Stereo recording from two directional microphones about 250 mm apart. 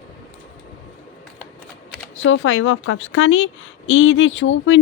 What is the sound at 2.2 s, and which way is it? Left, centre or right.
A woman's voice, left.